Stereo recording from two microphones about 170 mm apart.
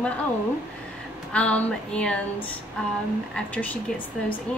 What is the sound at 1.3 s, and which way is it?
Speech, 5° left (ahead or behind).